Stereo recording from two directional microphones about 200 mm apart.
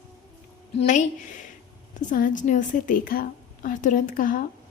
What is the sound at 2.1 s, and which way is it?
A woman's voice, 40° left (ahead or behind).